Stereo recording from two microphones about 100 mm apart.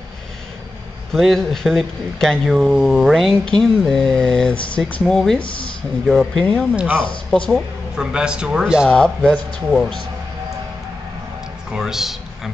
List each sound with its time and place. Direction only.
1.1 s speech: centre (ahead or behind)
5.4 s speech: 60° left (ahead or behind)
6.0 s speech: 5° left (ahead or behind)
6.7 s a man's voice: 10° right (ahead or behind)
7.2 s speech: 5° left (ahead or behind)
7.9 s a man's voice: 10° right (ahead or behind)
8.8 s speech: 10° left (ahead or behind)
11.7 s speech: 5° right (ahead or behind)